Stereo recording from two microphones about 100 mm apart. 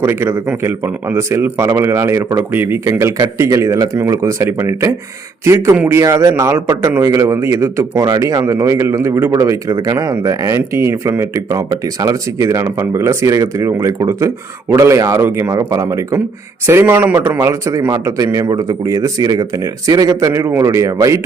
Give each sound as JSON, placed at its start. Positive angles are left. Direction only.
{"t": 0.0, "sound": "a man's voice", "side_deg": -20}
{"t": 15.4, "sound": "a man's voice", "side_deg": -35}
{"t": 17.3, "sound": "a man's voice", "side_deg": -30}